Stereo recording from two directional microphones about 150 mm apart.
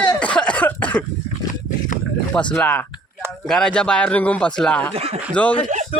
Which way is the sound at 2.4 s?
5° left (ahead or behind).